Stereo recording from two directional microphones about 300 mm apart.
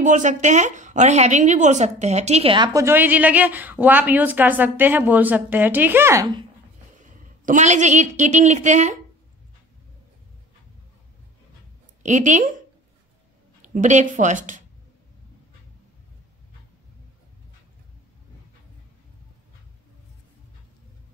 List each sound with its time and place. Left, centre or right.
0.0 s a woman's voice: right
7.4 s a woman's voice: right
12.0 s a woman's voice: right
13.6 s a woman's voice: right